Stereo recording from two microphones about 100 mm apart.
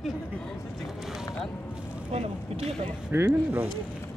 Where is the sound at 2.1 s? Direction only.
90° right.